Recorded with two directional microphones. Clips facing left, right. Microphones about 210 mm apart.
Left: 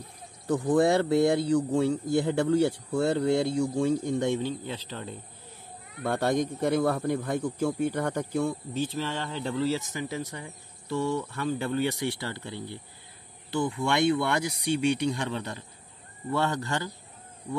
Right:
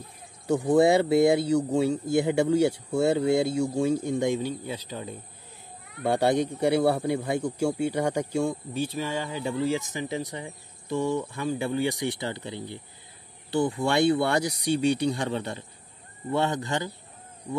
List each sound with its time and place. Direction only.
0.7 s speech: 15° right (ahead or behind)
13.5 s speech: 30° right (ahead or behind)